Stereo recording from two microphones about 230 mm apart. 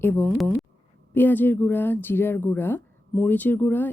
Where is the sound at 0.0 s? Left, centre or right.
Centre.